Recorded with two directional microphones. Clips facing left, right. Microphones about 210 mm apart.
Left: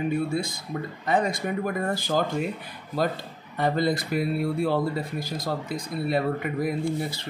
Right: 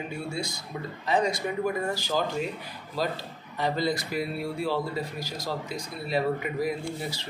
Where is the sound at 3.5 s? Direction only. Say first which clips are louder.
Left 3 dB; 55° left (ahead or behind).